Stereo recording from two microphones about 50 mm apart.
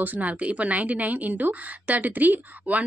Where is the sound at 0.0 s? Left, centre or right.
Right.